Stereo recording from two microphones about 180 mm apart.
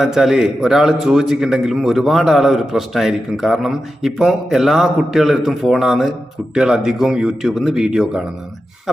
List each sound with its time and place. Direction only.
0.0 s a man's voice: centre (ahead or behind)